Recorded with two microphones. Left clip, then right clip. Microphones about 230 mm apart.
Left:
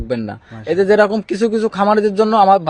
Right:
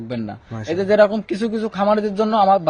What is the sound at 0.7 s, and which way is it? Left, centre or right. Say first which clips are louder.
A man's voice: left 3 dB; left.